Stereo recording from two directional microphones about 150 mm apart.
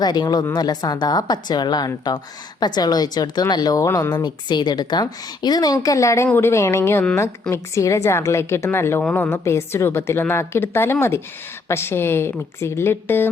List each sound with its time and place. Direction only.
0.0 s a woman's voice: 30° left (ahead or behind)